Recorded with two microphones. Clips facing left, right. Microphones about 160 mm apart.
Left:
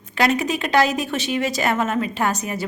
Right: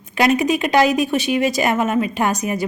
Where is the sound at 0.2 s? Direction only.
15° right (ahead or behind).